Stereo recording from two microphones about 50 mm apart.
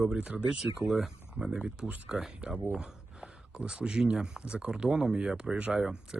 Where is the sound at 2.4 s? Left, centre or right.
Centre.